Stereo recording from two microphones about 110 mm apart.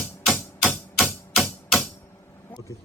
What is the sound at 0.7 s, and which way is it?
Music, centre (ahead or behind).